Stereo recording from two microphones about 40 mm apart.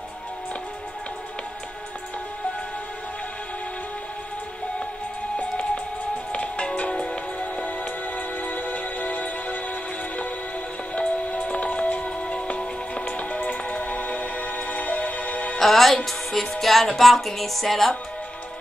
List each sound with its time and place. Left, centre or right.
6.3 s music: left
11.0 s music: left
15.6 s music: centre